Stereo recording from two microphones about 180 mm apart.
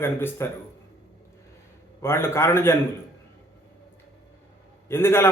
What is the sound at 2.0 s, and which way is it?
Speech, 15° left (ahead or behind).